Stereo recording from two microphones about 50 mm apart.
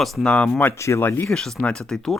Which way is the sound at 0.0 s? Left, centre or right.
Centre.